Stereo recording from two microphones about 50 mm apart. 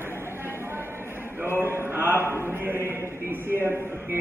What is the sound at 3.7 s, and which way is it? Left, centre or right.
Speech, right.